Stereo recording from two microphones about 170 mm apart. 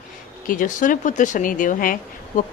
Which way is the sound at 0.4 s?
50° left (ahead or behind).